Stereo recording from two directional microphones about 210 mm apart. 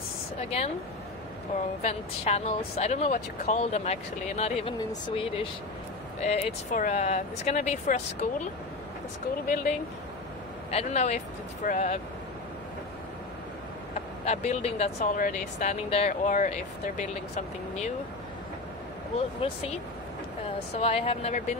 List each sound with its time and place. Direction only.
1.8 s speech: 30° left (ahead or behind)
10.7 s speech: 30° left (ahead or behind)
13.9 s speech: 35° left (ahead or behind)
19.4 s speech: 30° left (ahead or behind)
20.8 s speech: 25° left (ahead or behind)